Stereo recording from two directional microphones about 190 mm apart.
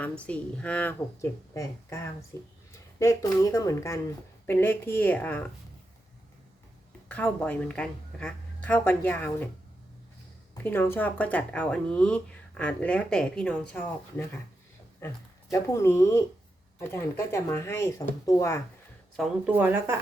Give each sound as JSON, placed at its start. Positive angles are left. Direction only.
{"t": 0.0, "sound": "speech", "side_deg": 5}
{"t": 7.1, "sound": "speech", "side_deg": 5}
{"t": 10.5, "sound": "speech", "side_deg": 10}
{"t": 15.5, "sound": "speech", "side_deg": 15}
{"t": 19.5, "sound": "speech", "side_deg": -10}